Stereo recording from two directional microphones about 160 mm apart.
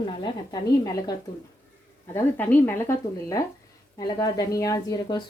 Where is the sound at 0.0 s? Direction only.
25° left (ahead or behind).